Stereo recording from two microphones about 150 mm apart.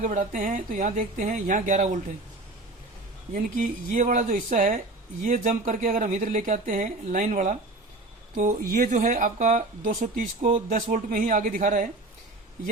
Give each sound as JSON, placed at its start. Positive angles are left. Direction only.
{"t": 0.0, "sound": "speech", "side_deg": -60}
{"t": 3.3, "sound": "speech", "side_deg": -60}
{"t": 8.7, "sound": "speech", "side_deg": -60}